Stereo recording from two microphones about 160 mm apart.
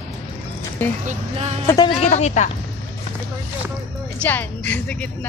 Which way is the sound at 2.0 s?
45° left (ahead or behind).